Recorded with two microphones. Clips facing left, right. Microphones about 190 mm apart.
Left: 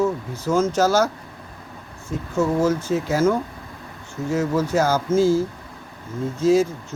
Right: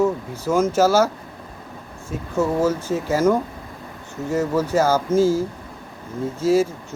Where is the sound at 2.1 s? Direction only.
10° right (ahead or behind).